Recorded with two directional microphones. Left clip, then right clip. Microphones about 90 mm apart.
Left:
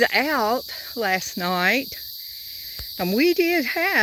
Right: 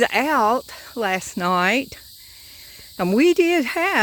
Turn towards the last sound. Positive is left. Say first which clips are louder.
# right 2 dB
turn(degrees=-35)  # may be behind; listen again after turning